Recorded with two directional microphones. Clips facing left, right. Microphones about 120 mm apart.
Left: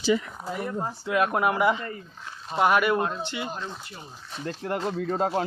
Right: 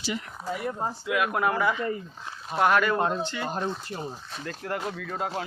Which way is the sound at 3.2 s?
15° left (ahead or behind).